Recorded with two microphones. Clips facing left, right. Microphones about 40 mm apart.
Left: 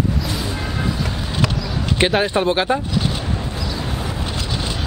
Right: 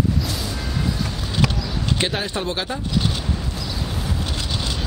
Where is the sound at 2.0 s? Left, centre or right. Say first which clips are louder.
Left 11 dB; left.